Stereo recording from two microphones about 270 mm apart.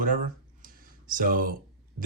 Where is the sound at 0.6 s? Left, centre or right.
Right.